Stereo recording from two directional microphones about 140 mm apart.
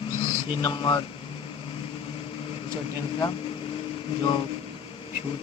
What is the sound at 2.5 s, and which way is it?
Vehicle, 35° left (ahead or behind).